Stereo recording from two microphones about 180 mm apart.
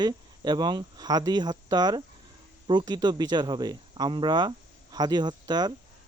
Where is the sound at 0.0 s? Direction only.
25° right (ahead or behind).